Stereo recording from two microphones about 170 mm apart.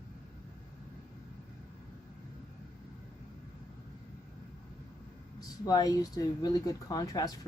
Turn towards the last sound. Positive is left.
turn(degrees=20)  # may be behind; listen again after turning